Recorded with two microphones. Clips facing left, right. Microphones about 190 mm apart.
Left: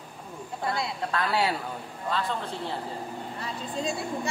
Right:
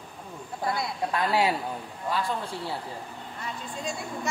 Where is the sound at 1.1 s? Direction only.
20° right (ahead or behind).